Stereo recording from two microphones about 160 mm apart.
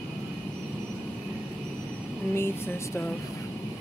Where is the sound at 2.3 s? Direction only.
15° left (ahead or behind).